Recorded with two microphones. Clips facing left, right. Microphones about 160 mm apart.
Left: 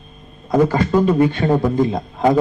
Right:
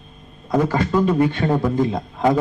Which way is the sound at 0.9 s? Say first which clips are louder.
Left 3 dB; 25° left (ahead or behind).